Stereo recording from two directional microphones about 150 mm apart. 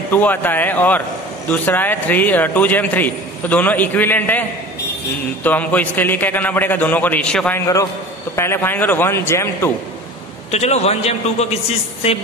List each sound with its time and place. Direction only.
0.1 s a man's voice: 10° left (ahead or behind)
7.6 s a man's voice: 20° left (ahead or behind)
10.5 s a man's voice: 45° left (ahead or behind)